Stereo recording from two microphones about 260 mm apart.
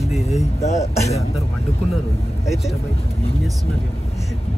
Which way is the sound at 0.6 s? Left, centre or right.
Left.